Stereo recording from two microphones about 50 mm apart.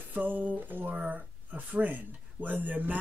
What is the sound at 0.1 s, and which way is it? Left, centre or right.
Speech, right.